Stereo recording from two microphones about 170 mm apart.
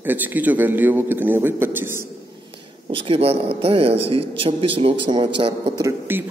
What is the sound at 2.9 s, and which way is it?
A man's voice, 30° right (ahead or behind).